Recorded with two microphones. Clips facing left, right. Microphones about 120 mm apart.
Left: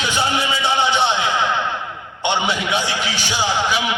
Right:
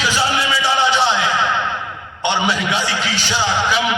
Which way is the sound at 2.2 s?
15° left (ahead or behind).